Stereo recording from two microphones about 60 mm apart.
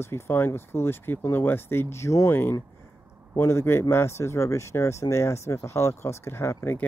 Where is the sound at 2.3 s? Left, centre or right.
Left.